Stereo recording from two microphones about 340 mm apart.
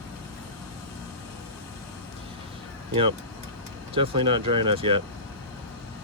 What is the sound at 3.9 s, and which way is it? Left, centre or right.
Speech, centre.